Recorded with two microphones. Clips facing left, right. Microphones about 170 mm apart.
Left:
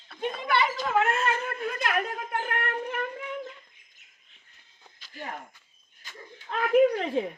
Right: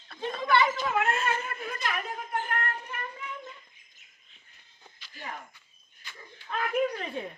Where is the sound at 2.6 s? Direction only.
90° left.